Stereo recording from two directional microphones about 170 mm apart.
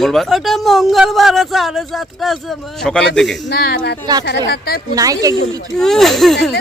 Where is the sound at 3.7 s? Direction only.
75° left (ahead or behind).